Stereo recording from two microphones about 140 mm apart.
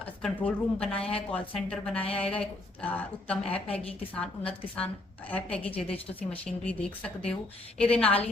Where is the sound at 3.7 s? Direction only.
45° left (ahead or behind).